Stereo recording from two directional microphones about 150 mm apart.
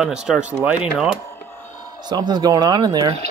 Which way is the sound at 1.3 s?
15° left (ahead or behind).